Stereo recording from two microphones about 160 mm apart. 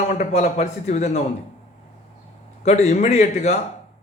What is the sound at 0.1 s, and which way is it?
A man's voice, 45° left (ahead or behind).